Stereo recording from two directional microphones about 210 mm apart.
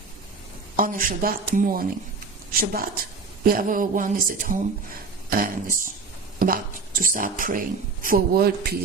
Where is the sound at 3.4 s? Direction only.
40° right (ahead or behind).